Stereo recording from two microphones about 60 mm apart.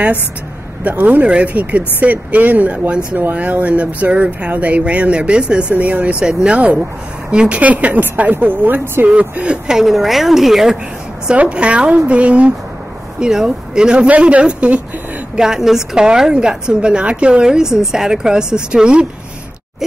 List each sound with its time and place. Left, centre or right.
0.8 s speech: right
9.1 s a woman's voice: centre
11.2 s a woman's voice: centre
15.3 s a woman's voice: centre